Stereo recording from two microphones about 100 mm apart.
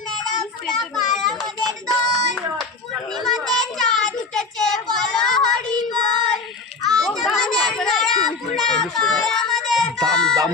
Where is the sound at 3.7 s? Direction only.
5° left (ahead or behind).